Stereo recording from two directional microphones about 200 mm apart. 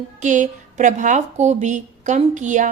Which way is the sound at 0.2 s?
40° right (ahead or behind).